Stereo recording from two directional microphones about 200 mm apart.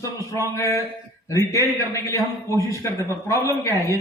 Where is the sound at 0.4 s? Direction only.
15° left (ahead or behind).